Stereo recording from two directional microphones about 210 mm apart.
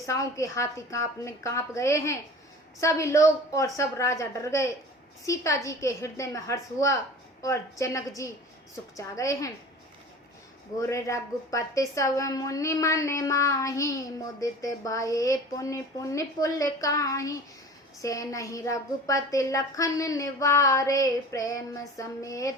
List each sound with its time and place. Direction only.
0.0 s a woman's voice: 15° left (ahead or behind)
10.8 s a woman's voice: 15° left (ahead or behind)